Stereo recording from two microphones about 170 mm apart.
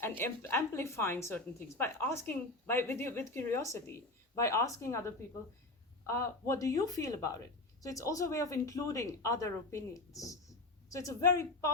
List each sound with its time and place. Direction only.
0.2 s a woman's voice: 15° left (ahead or behind)
6.1 s speech: 15° left (ahead or behind)